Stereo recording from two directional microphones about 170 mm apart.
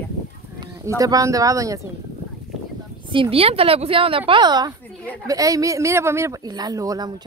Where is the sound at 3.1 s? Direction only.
30° right (ahead or behind).